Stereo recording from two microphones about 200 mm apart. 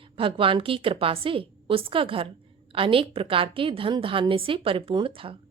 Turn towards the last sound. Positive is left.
turn(degrees=-25)  # may be behind; listen again after turning